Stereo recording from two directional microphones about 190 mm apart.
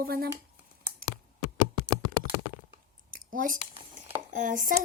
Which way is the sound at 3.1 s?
45° right (ahead or behind).